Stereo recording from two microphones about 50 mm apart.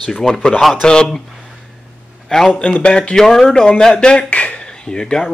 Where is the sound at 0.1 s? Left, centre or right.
Centre.